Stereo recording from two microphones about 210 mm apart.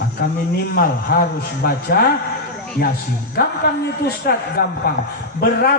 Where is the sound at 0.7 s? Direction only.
45° left (ahead or behind).